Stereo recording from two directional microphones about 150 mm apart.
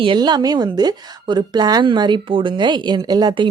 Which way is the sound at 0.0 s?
30° right (ahead or behind).